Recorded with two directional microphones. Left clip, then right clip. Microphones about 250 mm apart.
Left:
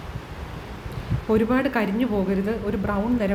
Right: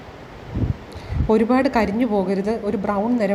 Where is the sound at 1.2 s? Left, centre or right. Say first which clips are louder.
Right 4 dB; centre.